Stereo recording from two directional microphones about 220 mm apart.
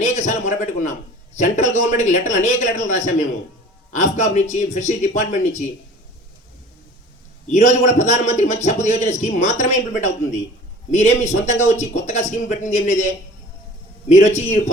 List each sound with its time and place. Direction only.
0.0 s a man's voice: 35° left (ahead or behind)
7.5 s a man's voice: 30° left (ahead or behind)